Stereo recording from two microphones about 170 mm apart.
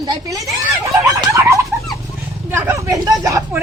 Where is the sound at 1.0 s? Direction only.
20° right (ahead or behind).